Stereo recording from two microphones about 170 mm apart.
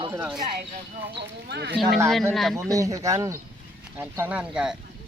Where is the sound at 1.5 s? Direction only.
75° right (ahead or behind).